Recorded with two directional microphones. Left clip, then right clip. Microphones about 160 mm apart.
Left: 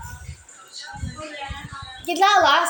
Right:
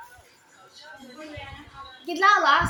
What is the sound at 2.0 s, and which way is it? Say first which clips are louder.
Speech: left 3 dB; 30° right (ahead or behind).